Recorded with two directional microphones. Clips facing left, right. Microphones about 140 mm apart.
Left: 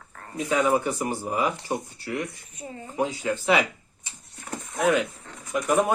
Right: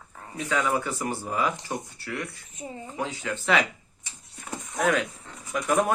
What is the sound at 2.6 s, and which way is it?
Speech, 20° right (ahead or behind).